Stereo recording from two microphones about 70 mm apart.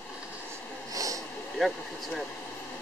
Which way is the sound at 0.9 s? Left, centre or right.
Right.